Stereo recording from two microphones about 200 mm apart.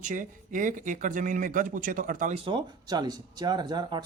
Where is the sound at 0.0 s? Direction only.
40° right (ahead or behind).